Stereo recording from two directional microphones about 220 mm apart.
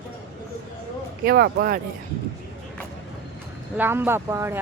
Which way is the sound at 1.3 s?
45° right (ahead or behind).